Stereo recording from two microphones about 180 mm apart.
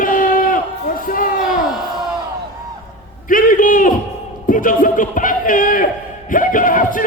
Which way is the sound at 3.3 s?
50° left (ahead or behind).